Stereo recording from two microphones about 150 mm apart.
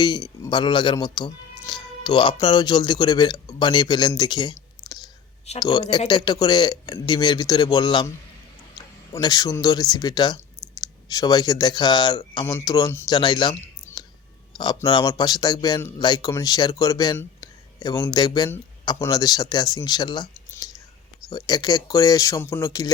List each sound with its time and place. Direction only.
0.0 s speech: 30° left (ahead or behind)
4.2 s clicking: 30° left (ahead or behind)
5.5 s speech: 25° left (ahead or behind)
9.1 s speech: 25° left (ahead or behind)
20.5 s whispering: 25° left (ahead or behind)
21.2 s speech: 25° left (ahead or behind)